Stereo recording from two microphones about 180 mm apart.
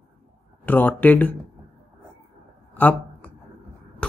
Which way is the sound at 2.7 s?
10° left (ahead or behind).